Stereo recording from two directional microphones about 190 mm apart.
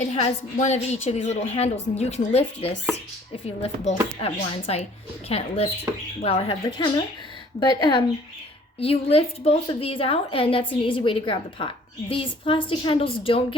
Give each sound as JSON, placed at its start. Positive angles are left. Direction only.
{"t": 0.0, "sound": "a woman's voice", "side_deg": 35}